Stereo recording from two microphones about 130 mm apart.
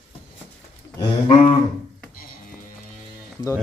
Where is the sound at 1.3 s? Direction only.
45° left (ahead or behind).